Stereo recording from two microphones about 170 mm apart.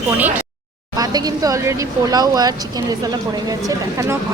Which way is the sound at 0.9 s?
20° right (ahead or behind).